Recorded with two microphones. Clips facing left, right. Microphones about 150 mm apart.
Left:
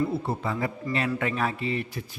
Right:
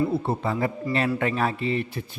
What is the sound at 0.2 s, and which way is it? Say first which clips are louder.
A man's voice: right 3 dB; 30° right (ahead or behind).